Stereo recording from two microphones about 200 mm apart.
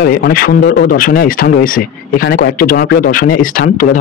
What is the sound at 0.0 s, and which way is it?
Speech, 50° left (ahead or behind).